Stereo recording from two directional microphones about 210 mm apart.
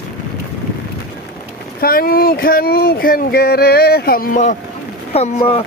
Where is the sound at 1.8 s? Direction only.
45° left (ahead or behind).